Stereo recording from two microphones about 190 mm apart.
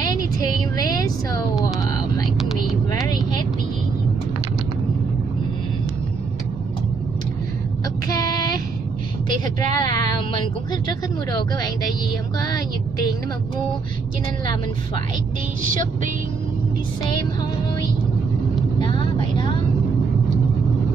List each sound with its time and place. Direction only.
0.7 s a sound: 20° left (ahead or behind)
1.6 s speech: 20° left (ahead or behind)
2.2 s a sound: centre (ahead or behind)
8.1 s child singing: 20° left (ahead or behind)
9.8 s speech: 25° left (ahead or behind)
18.8 s vehicle: 25° left (ahead or behind)